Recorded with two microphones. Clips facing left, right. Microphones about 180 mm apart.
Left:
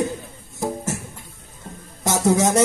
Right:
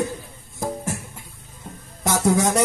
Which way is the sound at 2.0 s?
20° left (ahead or behind).